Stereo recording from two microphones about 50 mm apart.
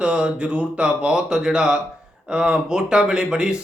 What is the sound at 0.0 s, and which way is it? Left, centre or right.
Speech, centre.